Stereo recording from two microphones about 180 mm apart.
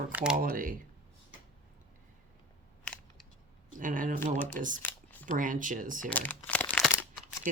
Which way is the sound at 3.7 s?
45° right (ahead or behind).